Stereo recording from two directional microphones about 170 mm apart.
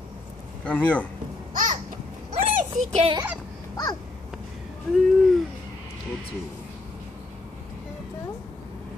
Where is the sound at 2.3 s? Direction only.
40° right (ahead or behind).